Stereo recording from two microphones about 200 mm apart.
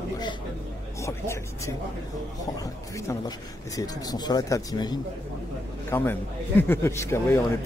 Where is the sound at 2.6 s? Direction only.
15° left (ahead or behind).